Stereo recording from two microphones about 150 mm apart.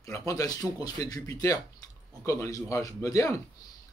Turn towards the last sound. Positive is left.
turn(degrees=20)  # may be behind; listen again after turning